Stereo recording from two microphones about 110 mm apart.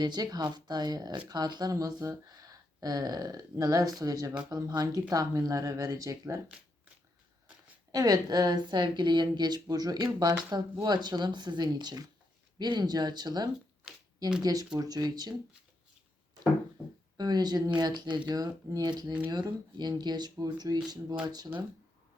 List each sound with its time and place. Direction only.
0.0 s speech: 35° right (ahead or behind)
7.9 s speech: 35° right (ahead or behind)
13.9 s a sound: 5° right (ahead or behind)
14.4 s speech: 35° right (ahead or behind)
16.8 s a sound: 15° right (ahead or behind)
17.2 s speech: 40° right (ahead or behind)